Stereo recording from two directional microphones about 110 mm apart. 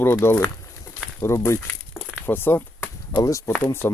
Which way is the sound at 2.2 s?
20° left (ahead or behind).